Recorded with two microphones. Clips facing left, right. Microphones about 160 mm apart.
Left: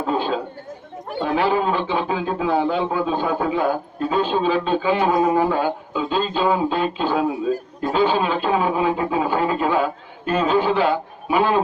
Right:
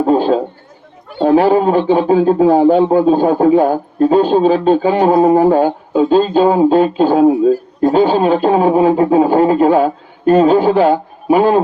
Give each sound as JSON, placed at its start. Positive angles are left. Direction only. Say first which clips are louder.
{"t": 0.0, "sound": "a man's voice", "louder": "right 10 dB", "side_deg": -40}